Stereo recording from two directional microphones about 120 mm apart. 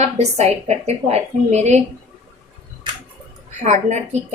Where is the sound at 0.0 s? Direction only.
65° right (ahead or behind).